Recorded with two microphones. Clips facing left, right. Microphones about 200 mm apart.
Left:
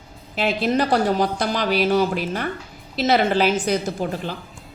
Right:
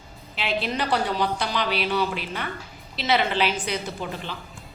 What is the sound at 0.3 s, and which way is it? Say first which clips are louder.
A woman's voice: left 7 dB; 45° left (ahead or behind).